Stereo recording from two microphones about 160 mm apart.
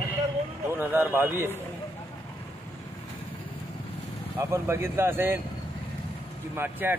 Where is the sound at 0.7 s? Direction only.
15° right (ahead or behind).